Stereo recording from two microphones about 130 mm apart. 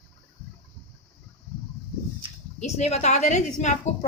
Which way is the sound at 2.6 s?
60° left (ahead or behind).